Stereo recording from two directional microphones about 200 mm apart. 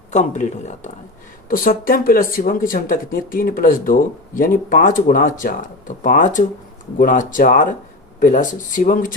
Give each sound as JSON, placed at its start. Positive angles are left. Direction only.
{"t": 0.1, "sound": "speech", "side_deg": 35}